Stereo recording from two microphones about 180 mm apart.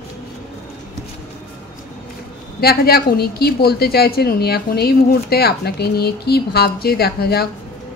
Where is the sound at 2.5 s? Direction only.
60° left (ahead or behind).